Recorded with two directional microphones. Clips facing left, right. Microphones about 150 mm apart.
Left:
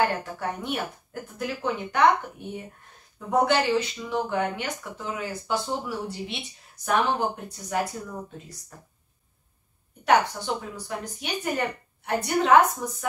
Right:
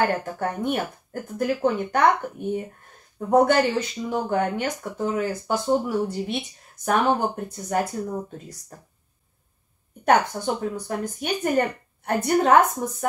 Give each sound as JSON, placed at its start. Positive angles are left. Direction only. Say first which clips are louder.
{"t": 0.0, "sound": "speech", "louder": "right 2 dB", "side_deg": -50}
{"t": 3.3, "sound": "speech", "louder": "right 4 dB", "side_deg": -50}
{"t": 10.0, "sound": "speech", "louder": "right 2 dB", "side_deg": -45}